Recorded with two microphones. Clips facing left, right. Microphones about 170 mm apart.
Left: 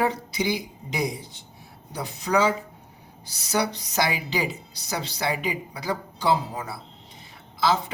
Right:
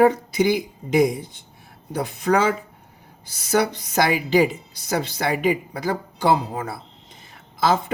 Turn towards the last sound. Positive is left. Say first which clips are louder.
# right 3 dB
turn(degrees=-50)  # may be behind; listen again after turning